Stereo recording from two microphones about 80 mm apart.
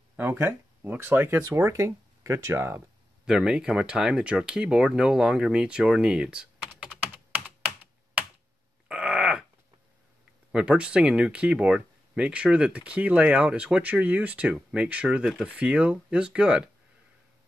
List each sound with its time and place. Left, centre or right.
0.2 s speech: right
1.5 s speech: right
3.3 s speech: centre
7.3 s computer keyboard: right
8.8 s a sound: centre
10.5 s speech: centre